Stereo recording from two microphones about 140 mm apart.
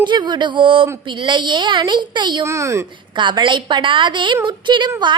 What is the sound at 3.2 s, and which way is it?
A woman's voice, 35° right (ahead or behind).